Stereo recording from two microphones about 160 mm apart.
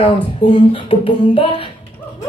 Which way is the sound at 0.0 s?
35° left (ahead or behind).